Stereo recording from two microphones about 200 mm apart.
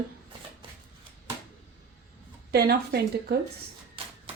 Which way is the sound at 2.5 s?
55° right (ahead or behind).